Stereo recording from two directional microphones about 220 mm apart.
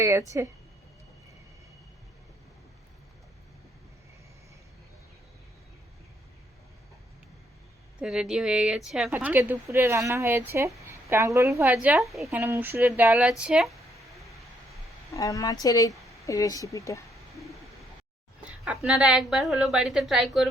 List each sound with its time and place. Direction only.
0.0 s a woman's voice: 10° right (ahead or behind)
8.0 s a woman's voice: 5° right (ahead or behind)
15.1 s a woman's voice: 15° left (ahead or behind)
18.6 s a woman's voice: 5° right (ahead or behind)